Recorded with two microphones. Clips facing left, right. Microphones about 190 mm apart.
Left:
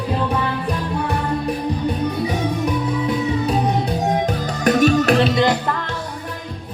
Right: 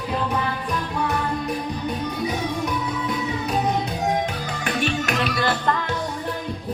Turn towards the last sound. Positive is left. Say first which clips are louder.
# left 8 dB
turn(degrees=20)  # may be behind; listen again after turning